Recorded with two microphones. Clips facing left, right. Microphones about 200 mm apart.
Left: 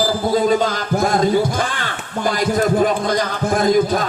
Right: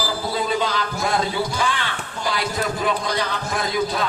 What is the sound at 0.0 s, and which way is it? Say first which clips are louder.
A man's voice: left 8 dB; 45° left (ahead or behind).